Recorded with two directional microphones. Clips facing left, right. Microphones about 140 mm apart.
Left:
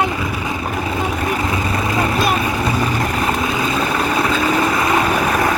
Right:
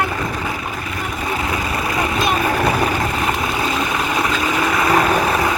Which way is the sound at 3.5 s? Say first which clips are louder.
Left 1 dB; 20° left (ahead or behind).